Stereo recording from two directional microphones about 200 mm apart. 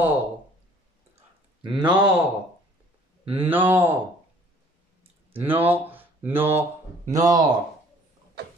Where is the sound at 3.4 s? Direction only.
10° right (ahead or behind).